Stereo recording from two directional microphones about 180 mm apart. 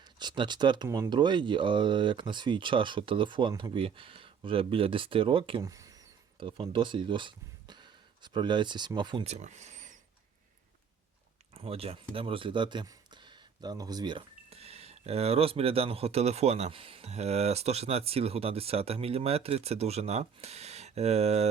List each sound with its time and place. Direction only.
0.0 s speech: 25° right (ahead or behind)
5.6 s speech: 20° right (ahead or behind); by 10.0 s 45° right (ahead or behind)
11.5 s speech: 35° right (ahead or behind)